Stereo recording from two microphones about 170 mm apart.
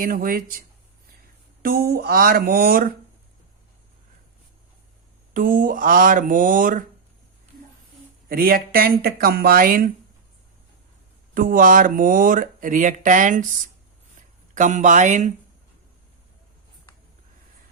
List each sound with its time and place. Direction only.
0.0 s speech: 55° right (ahead or behind)
1.6 s speech: 60° right (ahead or behind)
5.3 s speech: 55° right (ahead or behind)
8.3 s speech: 60° right (ahead or behind)
11.3 s speech: 55° right (ahead or behind)
14.5 s speech: 50° right (ahead or behind)